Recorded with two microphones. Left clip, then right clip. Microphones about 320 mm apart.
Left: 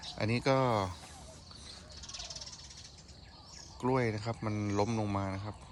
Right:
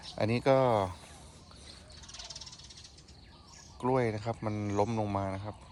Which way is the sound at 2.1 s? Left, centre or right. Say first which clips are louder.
Left 1 dB; right.